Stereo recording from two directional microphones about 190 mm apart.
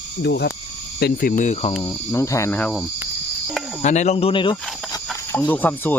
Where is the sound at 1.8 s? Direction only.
15° left (ahead or behind).